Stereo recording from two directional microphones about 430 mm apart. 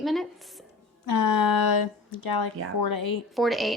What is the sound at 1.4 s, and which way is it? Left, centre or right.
Speech, left.